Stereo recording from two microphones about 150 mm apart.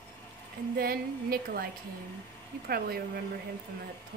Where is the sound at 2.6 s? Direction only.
90° right.